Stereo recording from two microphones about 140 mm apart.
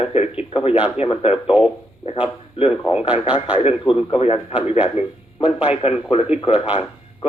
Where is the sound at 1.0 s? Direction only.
45° left (ahead or behind).